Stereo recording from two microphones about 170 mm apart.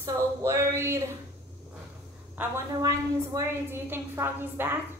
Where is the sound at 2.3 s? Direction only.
15° right (ahead or behind).